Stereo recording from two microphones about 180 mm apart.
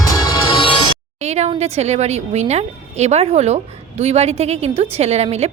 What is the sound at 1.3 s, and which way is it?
A woman's voice, 35° right (ahead or behind).